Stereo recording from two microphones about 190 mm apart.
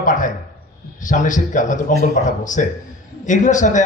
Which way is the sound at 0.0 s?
45° left (ahead or behind).